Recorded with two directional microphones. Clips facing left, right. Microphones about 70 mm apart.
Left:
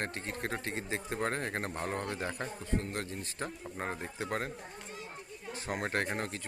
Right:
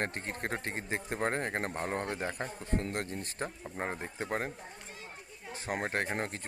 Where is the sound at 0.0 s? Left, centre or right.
Right.